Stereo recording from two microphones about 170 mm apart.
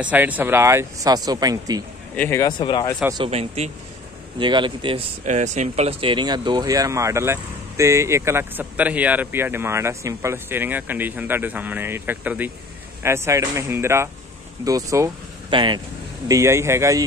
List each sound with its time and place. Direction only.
0.0 s speech: 10° right (ahead or behind)
2.1 s a man's voice: 10° left (ahead or behind)
2.4 s speech: 25° left (ahead or behind)
3.3 s speech: 40° right (ahead or behind)
4.4 s a man's voice: 25° right (ahead or behind)
5.2 s a man's voice: 45° right (ahead or behind); by 15.8 s 30° right (ahead or behind)
16.3 s speech: 15° right (ahead or behind)